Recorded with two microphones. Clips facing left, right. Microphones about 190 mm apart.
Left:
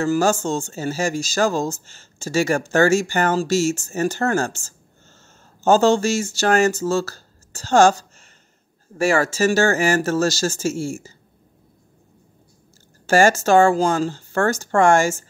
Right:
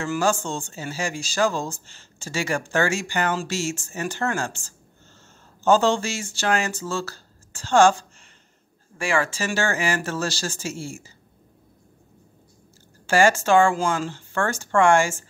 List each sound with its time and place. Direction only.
0.0 s speech: 40° left (ahead or behind)
13.0 s speech: 45° left (ahead or behind)